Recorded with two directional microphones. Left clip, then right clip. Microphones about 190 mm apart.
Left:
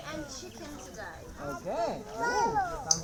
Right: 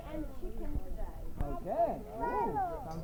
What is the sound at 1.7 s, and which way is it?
Speech, 55° left (ahead or behind).